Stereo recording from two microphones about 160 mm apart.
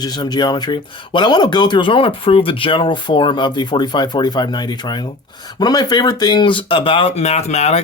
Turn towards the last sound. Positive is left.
turn(degrees=40)  # may be behind; listen again after turning